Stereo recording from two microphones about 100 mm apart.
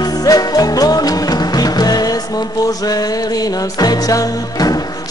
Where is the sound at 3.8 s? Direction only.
40° left (ahead or behind).